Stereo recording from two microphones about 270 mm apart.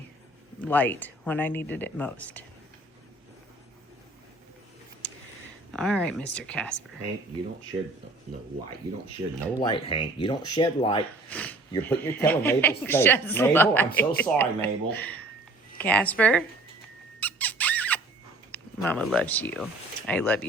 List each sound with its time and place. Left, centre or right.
0.6 s speech: centre
5.7 s speech: centre
9.6 s speech: centre
11.3 s speech: centre
17.2 s squeak: centre
18.5 s speech: centre